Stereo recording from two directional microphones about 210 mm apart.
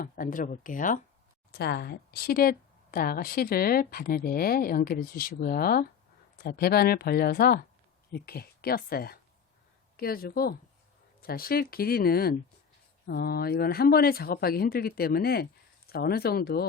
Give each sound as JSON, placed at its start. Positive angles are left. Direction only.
{"t": 0.0, "sound": "speech", "side_deg": 40}
{"t": 1.5, "sound": "speech", "side_deg": 50}